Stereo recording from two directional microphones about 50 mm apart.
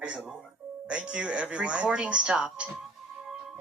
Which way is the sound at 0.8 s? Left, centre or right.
Right.